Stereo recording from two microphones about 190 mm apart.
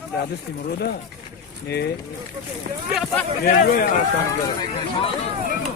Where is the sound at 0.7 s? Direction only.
60° left (ahead or behind).